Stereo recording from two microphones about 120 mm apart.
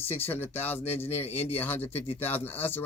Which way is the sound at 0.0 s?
15° left (ahead or behind).